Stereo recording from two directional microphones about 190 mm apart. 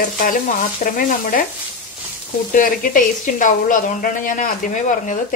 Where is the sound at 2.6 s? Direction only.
45° left (ahead or behind).